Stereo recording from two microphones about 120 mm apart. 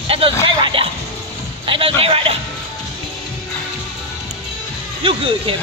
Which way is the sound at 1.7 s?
50° right (ahead or behind).